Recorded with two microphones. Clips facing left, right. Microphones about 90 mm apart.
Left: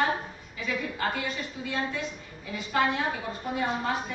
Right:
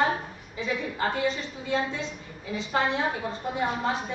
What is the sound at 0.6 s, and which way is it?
A woman's voice, 25° right (ahead or behind).